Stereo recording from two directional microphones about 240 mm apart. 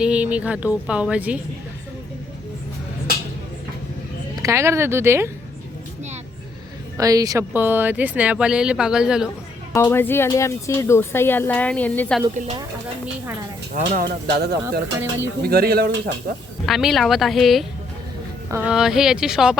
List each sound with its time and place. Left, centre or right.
0.0 s speech: centre
4.4 s speech: centre
6.9 s speech: centre
9.7 s speech: centre
13.7 s speech: right
16.6 s speech: centre